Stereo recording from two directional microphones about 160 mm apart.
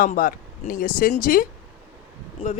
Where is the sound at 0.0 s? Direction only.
60° left (ahead or behind).